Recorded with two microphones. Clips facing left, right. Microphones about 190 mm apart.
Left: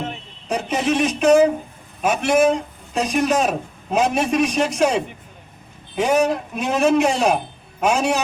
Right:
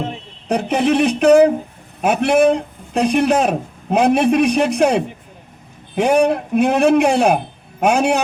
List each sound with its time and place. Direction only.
0.4 s a man's voice: 60° right (ahead or behind)